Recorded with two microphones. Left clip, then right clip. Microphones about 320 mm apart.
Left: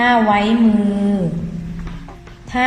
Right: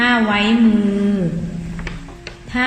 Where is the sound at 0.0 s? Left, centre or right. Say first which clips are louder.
Left 2 dB; centre.